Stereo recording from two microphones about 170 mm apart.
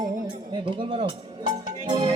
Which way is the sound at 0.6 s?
30° right (ahead or behind).